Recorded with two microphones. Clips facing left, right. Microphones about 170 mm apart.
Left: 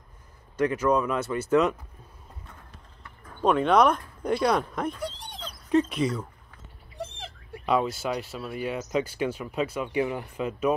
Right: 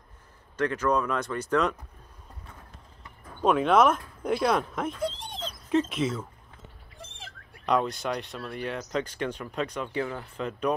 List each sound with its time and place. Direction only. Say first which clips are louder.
0.6 s speech: left 2 dB; 10° left (ahead or behind)
3.4 s speech: left 1 dB; 5° right (ahead or behind)
5.0 s dog: right 4 dB; 20° right (ahead or behind)
5.7 s speech: left 2 dB; centre (ahead or behind)
7.6 s speech: left 1 dB; 5° left (ahead or behind)